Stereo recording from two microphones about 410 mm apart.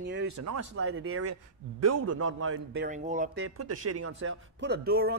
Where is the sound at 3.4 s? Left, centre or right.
Right.